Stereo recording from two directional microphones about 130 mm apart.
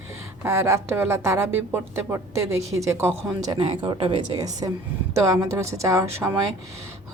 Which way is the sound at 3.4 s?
35° right (ahead or behind).